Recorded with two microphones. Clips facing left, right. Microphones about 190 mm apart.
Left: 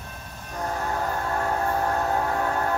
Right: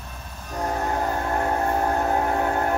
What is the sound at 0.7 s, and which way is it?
Train, 30° right (ahead or behind).